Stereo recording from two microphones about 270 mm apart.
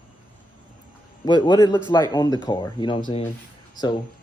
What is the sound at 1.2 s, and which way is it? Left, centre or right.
Speech, centre.